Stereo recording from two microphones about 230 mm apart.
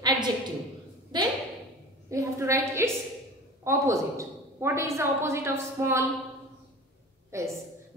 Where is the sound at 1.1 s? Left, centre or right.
Centre.